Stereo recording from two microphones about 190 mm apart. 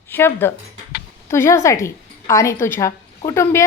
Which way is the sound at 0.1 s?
10° left (ahead or behind).